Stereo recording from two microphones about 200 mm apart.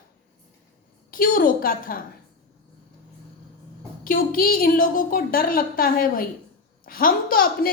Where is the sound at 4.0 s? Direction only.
45° left (ahead or behind).